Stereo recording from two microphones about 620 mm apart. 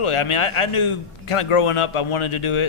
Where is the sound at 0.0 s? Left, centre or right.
Left.